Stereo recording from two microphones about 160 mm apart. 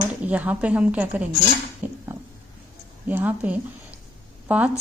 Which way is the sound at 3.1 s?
10° right (ahead or behind).